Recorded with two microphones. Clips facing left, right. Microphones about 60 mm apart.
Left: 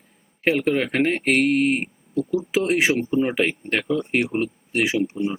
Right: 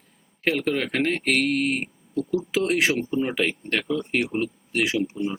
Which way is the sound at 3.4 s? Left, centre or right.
Centre.